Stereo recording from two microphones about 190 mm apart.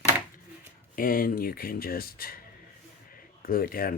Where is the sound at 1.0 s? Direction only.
50° left (ahead or behind).